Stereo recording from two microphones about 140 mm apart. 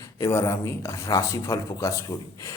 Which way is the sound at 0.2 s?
20° left (ahead or behind).